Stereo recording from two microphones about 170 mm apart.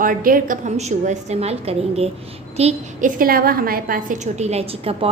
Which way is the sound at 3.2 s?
60° right (ahead or behind).